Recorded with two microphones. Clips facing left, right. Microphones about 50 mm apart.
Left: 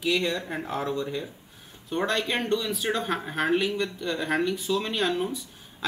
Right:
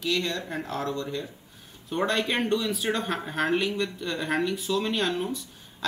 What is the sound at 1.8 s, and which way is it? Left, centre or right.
Speech, centre.